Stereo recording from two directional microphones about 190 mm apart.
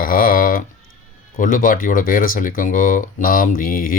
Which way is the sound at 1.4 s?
45° left (ahead or behind).